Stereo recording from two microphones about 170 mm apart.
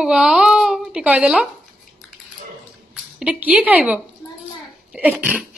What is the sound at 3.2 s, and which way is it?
A woman's voice, 5° right (ahead or behind).